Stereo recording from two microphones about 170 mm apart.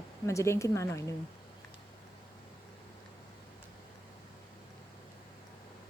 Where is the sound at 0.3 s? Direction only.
15° left (ahead or behind).